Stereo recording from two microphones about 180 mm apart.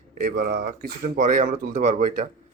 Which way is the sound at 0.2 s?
50° right (ahead or behind).